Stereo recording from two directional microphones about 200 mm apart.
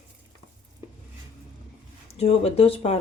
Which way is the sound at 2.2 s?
30° left (ahead or behind).